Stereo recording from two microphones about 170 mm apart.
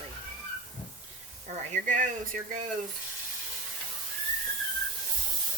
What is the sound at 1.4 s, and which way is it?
Speech, 50° right (ahead or behind).